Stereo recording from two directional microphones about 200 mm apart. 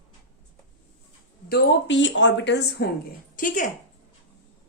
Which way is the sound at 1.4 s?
60° left (ahead or behind).